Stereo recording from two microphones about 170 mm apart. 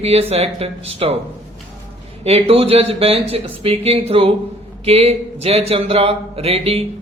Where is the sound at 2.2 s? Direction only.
35° right (ahead or behind).